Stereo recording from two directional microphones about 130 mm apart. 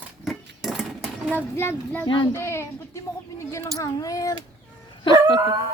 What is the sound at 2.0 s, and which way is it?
Speech, 40° left (ahead or behind).